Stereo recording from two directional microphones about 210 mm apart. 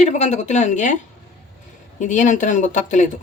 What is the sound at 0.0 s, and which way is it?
Speech, 35° left (ahead or behind).